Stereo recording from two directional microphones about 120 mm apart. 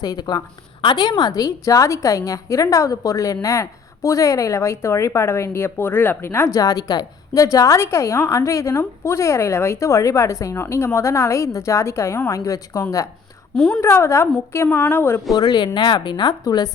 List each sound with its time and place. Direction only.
0.0 s a woman's voice: 35° left (ahead or behind)
13.6 s a woman's voice: 10° left (ahead or behind)
13.8 s a woman's voice: 20° left (ahead or behind)
15.4 s speech: 35° left (ahead or behind)